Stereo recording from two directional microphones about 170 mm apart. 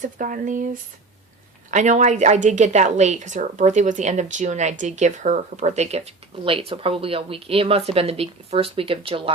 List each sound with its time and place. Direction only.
0.0 s a woman's voice: 50° right (ahead or behind); by 9.3 s 30° right (ahead or behind)